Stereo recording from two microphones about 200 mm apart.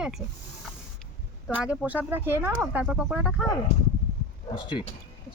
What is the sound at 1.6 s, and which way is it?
Speech, 5° right (ahead or behind).